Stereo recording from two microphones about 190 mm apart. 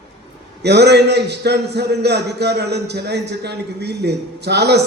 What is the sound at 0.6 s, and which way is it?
A man's voice, 60° right (ahead or behind).